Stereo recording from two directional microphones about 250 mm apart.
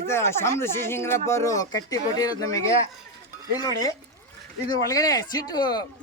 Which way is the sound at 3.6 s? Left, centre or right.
Centre.